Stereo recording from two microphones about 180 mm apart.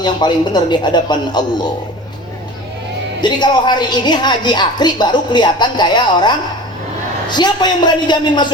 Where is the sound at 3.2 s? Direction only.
25° left (ahead or behind).